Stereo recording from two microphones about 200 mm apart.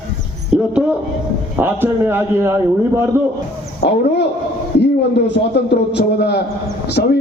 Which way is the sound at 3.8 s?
55° left (ahead or behind).